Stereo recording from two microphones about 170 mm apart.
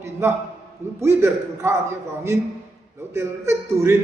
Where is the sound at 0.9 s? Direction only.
15° right (ahead or behind).